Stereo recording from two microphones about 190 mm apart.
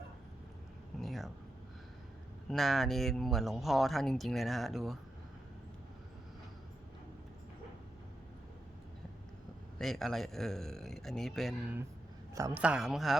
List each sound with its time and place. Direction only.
0.9 s air conditioning: centre (ahead or behind)
2.5 s speech: centre (ahead or behind)
9.7 s speech: centre (ahead or behind)
12.3 s a woman's voice: 15° right (ahead or behind)
12.6 s speech: 5° right (ahead or behind)